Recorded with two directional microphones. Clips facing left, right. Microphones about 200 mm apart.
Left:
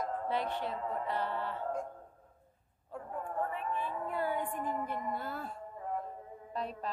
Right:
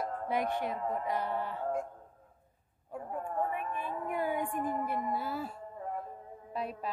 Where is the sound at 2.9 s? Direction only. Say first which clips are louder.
Right 2 dB; 10° right (ahead or behind).